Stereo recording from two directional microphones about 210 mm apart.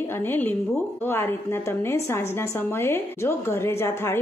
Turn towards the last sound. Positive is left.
turn(degrees=10)  # may be behind; listen again after turning